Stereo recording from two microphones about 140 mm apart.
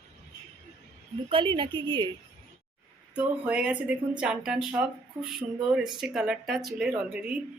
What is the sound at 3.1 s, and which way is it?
Speech, 10° right (ahead or behind).